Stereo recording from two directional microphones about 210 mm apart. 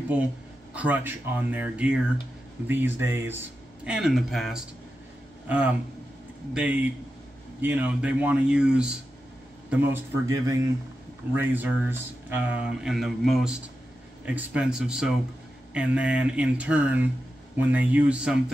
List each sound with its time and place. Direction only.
0.7 s speech: 10° right (ahead or behind)